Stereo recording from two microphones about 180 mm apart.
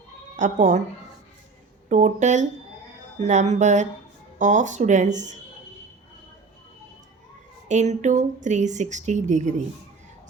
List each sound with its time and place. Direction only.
0.3 s speech: 45° right (ahead or behind)
1.9 s speech: 45° right (ahead or behind)
7.7 s speech: 40° right (ahead or behind)